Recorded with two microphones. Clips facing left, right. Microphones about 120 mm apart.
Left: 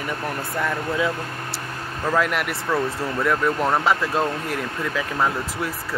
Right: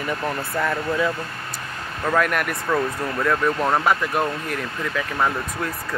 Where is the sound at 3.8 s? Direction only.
20° right (ahead or behind).